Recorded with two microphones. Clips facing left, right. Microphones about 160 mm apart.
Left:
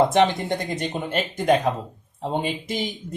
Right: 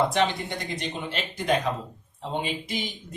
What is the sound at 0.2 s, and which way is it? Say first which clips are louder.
Speech: left 6 dB; 50° left (ahead or behind).